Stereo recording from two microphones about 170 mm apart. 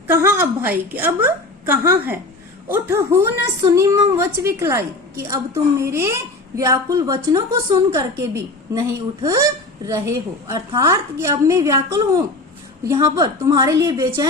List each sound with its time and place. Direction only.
0.1 s a woman's voice: 15° right (ahead or behind)